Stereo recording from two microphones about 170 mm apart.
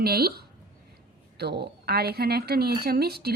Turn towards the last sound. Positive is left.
turn(degrees=-65)  # may be behind; listen again after turning